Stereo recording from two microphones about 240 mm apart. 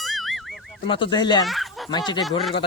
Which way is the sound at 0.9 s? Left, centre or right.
Centre.